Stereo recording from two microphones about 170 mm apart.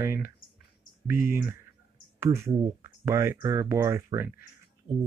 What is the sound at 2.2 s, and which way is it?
Speech, 15° right (ahead or behind).